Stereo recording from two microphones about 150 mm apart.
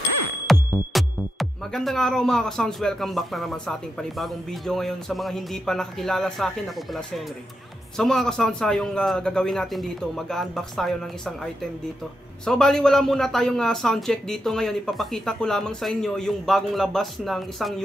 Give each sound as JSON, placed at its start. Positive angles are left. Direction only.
{"t": 0.5, "sound": "music", "side_deg": 0}
{"t": 0.9, "sound": "speech", "side_deg": 0}
{"t": 12.4, "sound": "speech", "side_deg": 5}